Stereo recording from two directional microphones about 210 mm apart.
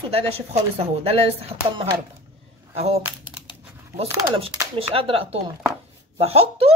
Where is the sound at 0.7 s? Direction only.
25° right (ahead or behind).